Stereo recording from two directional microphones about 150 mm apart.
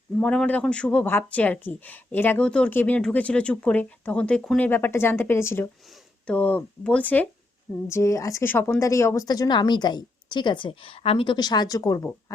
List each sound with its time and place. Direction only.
0.2 s speech: 10° left (ahead or behind)